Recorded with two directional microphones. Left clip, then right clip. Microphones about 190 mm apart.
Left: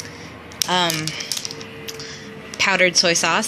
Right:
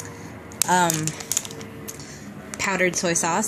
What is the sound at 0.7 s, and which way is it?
Speech, 15° right (ahead or behind).